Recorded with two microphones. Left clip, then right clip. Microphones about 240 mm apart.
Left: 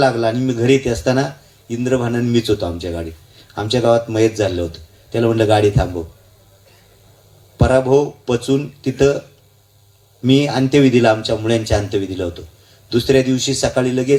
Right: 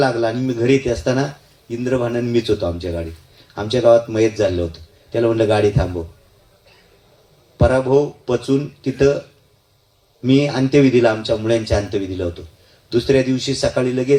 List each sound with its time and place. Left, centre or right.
0.0 s speech: left
7.5 s speech: left
10.2 s speech: left